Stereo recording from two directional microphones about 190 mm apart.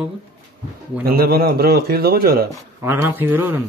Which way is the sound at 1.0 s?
50° right (ahead or behind).